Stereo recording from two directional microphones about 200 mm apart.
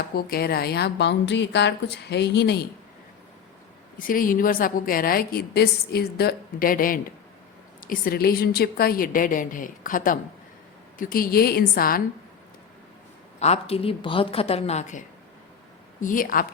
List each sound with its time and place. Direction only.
0.1 s a woman's voice: 50° left (ahead or behind)
3.9 s a woman's voice: 45° left (ahead or behind)
13.4 s a woman's voice: 30° left (ahead or behind)